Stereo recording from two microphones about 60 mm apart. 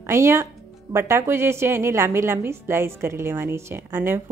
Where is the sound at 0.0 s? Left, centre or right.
Right.